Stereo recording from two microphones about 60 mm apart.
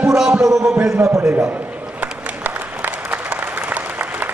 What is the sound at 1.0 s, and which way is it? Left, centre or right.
Speech, right.